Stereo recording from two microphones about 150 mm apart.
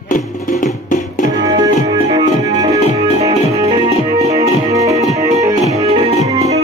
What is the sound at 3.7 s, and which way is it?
Music, 40° right (ahead or behind).